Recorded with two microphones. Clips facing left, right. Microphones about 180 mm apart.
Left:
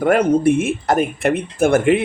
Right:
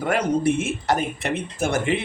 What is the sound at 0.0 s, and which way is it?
Speech, 55° left (ahead or behind).